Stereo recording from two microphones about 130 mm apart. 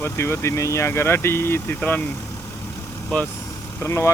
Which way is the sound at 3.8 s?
20° left (ahead or behind).